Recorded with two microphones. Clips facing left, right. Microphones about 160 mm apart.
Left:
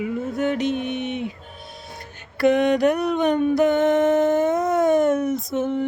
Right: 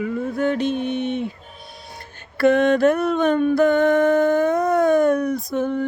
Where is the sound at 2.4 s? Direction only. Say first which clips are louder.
Right 2 dB; 15° left (ahead or behind).